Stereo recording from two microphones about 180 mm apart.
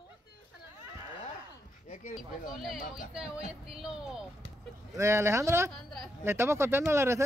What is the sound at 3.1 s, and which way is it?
Speech, 5° right (ahead or behind).